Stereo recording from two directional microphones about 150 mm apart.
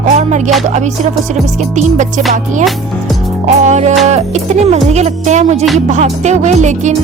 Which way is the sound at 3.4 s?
50° right (ahead or behind).